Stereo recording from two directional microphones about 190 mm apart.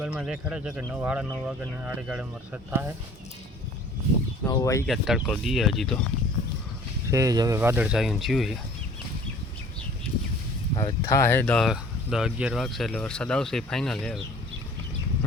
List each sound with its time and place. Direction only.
0.0 s speech: 5° right (ahead or behind)
4.4 s speech: 20° left (ahead or behind)
4.9 s speech: centre (ahead or behind)
7.1 s speech: 15° right (ahead or behind); by 8.5 s centre (ahead or behind)
10.8 s speech: 15° left (ahead or behind)